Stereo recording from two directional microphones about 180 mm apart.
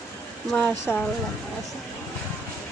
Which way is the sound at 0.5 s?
10° left (ahead or behind).